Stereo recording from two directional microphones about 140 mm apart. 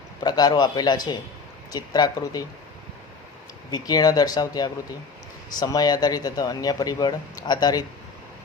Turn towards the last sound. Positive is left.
turn(degrees=30)  # may be behind; listen again after turning